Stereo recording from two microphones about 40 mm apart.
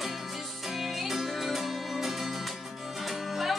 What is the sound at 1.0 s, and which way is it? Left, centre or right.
Music, centre.